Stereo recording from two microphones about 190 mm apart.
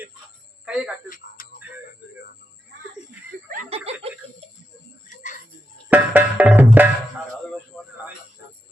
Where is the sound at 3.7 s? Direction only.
30° right (ahead or behind).